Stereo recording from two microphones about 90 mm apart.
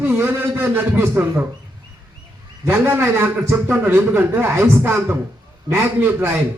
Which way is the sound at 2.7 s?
25° right (ahead or behind).